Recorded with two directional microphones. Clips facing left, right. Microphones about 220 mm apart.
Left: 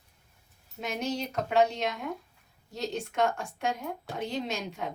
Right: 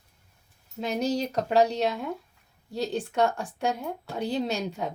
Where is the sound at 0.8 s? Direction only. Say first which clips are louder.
Right 5 dB; 35° right (ahead or behind).